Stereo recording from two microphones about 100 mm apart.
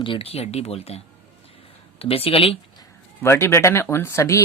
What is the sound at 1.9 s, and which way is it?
Speech, 70° left (ahead or behind).